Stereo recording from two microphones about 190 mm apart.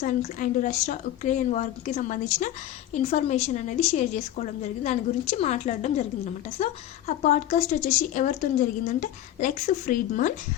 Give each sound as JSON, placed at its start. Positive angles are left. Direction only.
{"t": 0.2, "sound": "a woman's voice", "side_deg": 40}
{"t": 7.2, "sound": "a woman's voice", "side_deg": 40}